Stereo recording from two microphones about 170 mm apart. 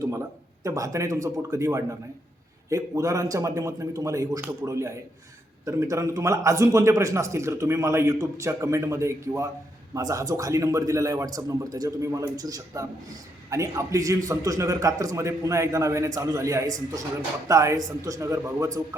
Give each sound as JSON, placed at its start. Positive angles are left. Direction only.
{"t": 0.0, "sound": "a man's voice", "side_deg": -15}